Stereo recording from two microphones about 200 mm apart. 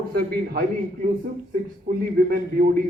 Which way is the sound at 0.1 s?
50° right (ahead or behind).